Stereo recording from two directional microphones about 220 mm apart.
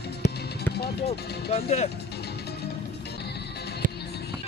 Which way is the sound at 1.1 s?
45° left (ahead or behind).